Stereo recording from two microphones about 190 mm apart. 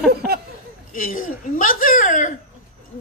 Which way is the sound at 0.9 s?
45° left (ahead or behind).